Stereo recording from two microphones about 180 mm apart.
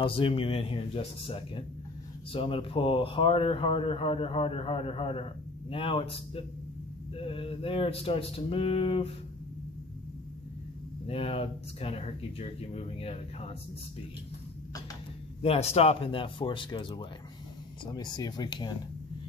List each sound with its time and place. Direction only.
0.0 s a man's voice: 30° left (ahead or behind)
11.1 s a man's voice: 35° left (ahead or behind)
15.4 s speech: 35° left (ahead or behind)